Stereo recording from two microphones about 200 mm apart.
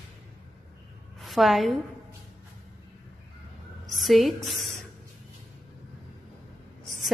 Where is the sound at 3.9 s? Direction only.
Centre (ahead or behind).